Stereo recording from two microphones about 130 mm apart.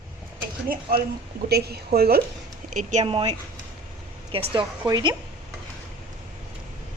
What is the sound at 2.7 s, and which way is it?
Speech, 80° right.